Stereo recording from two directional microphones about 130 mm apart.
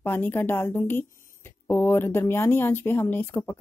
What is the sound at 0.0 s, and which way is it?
Speech, 15° left (ahead or behind).